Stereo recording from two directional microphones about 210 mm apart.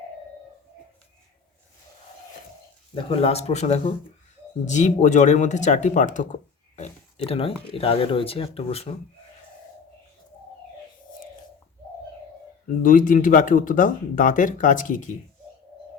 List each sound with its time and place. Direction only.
2.9 s speech: 25° left (ahead or behind)
12.8 s speech: 40° left (ahead or behind)